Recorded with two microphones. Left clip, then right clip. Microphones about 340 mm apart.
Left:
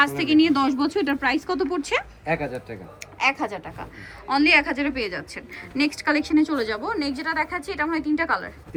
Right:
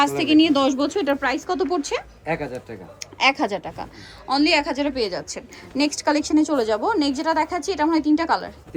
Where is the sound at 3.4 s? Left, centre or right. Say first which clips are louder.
Right 5 dB; centre.